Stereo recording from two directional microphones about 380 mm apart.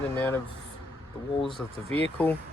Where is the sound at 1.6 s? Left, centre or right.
Centre.